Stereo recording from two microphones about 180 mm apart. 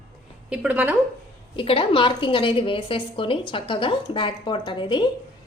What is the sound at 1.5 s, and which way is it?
A woman's voice, 30° left (ahead or behind).